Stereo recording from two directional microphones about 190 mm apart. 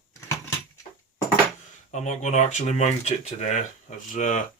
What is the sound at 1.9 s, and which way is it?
Speech, 40° left (ahead or behind).